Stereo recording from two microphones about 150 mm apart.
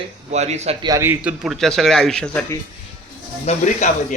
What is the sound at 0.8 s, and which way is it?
A man's voice, 25° right (ahead or behind).